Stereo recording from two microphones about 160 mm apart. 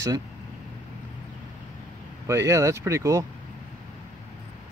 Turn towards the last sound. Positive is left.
turn(degrees=-20)  # may be behind; listen again after turning